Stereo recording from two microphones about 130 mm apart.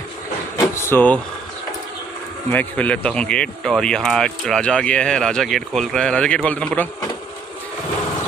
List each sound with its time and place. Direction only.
0.6 s vehicle: 20° left (ahead or behind)
2.5 s speech: 15° left (ahead or behind)